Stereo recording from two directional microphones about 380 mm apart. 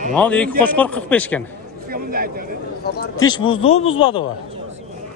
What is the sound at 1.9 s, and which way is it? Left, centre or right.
Speech, right.